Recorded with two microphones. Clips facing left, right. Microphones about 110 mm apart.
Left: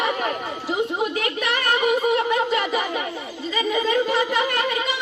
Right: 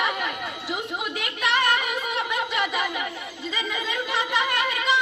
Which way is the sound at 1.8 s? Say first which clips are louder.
Left 9 dB; 35° left (ahead or behind).